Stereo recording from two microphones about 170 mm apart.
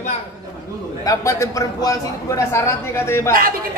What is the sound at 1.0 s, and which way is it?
A man's voice, 20° left (ahead or behind).